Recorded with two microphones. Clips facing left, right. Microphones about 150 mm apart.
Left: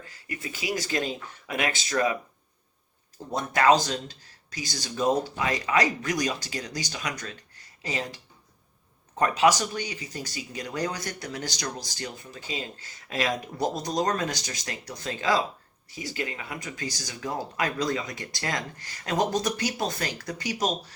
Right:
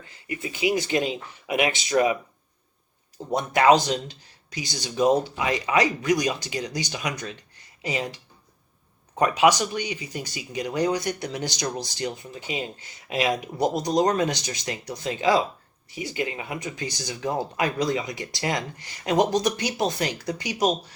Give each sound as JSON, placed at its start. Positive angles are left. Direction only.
{"t": 0.0, "sound": "speech", "side_deg": -20}
{"t": 3.2, "sound": "speech", "side_deg": -20}
{"t": 9.1, "sound": "speech", "side_deg": -15}